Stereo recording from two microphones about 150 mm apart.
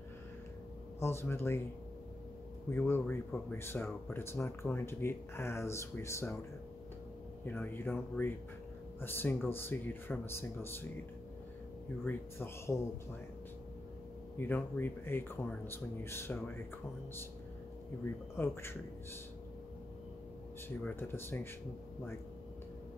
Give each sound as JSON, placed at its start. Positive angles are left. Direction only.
{"t": 0.9, "sound": "speech", "side_deg": 15}
{"t": 2.7, "sound": "speech", "side_deg": 15}
{"t": 7.4, "sound": "speech", "side_deg": 10}
{"t": 12.0, "sound": "speech", "side_deg": 15}
{"t": 14.4, "sound": "speech", "side_deg": 15}
{"t": 18.3, "sound": "speech", "side_deg": 15}
{"t": 20.6, "sound": "speech", "side_deg": 15}